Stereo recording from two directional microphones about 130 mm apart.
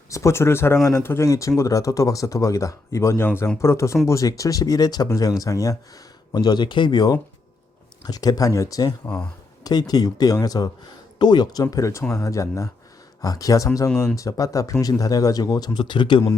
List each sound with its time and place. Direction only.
0.1 s speech: 20° left (ahead or behind)
9.0 s speech: 10° left (ahead or behind)
9.6 s speech: 30° left (ahead or behind)